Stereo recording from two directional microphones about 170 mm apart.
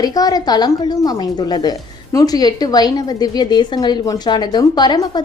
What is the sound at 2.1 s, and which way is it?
A woman's voice, 20° left (ahead or behind).